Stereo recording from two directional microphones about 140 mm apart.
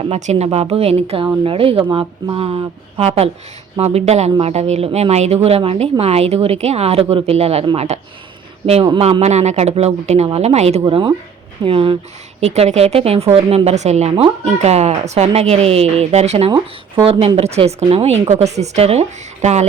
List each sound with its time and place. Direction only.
0.0 s a woman's voice: 50° right (ahead or behind)
8.6 s a woman's voice: 40° right (ahead or behind)
10.8 s a woman's voice: 35° right (ahead or behind); by 19.6 s 55° right (ahead or behind)